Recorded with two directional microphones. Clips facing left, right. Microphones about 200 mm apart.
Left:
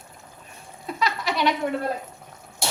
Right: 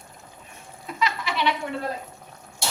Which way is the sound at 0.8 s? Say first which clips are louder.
Left 1 dB; 40° left (ahead or behind).